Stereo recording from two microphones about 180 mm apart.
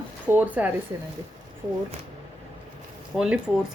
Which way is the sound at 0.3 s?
10° right (ahead or behind).